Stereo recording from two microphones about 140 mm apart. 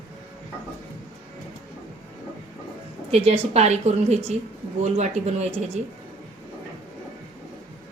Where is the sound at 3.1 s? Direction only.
50° right (ahead or behind).